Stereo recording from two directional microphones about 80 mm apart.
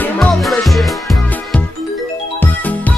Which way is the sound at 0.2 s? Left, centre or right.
Centre.